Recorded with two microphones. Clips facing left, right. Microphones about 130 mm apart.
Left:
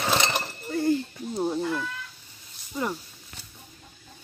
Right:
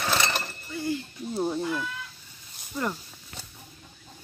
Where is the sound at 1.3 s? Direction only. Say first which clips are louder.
Left 1 dB; centre (ahead or behind).